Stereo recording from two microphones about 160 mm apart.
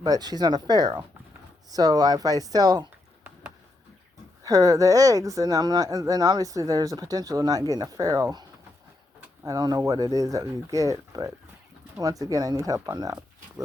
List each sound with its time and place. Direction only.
0.0 s speech: 25° right (ahead or behind)
4.4 s speech: 20° right (ahead or behind)